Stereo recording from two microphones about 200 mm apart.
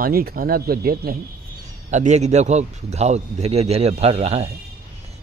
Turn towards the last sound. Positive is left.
turn(degrees=-30)  # may be behind; listen again after turning